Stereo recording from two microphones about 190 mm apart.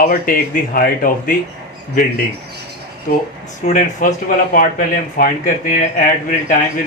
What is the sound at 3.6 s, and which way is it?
Speech, 45° left (ahead or behind).